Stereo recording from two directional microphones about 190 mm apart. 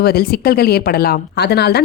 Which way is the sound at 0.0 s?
55° left (ahead or behind).